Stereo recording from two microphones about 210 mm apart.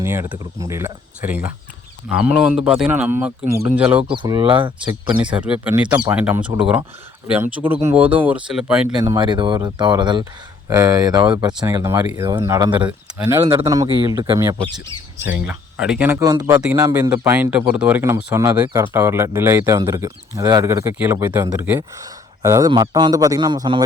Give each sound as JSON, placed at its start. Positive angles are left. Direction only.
{"t": 0.0, "sound": "speech", "side_deg": -10}
{"t": 4.2, "sound": "speech", "side_deg": -20}
{"t": 5.2, "sound": "speech", "side_deg": -5}
{"t": 9.0, "sound": "speech", "side_deg": -20}
{"t": 13.4, "sound": "speech", "side_deg": -25}
{"t": 15.3, "sound": "speech", "side_deg": -5}